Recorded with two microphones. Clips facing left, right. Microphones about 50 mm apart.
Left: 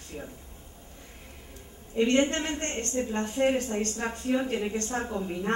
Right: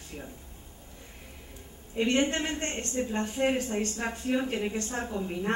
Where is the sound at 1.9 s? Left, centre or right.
Centre.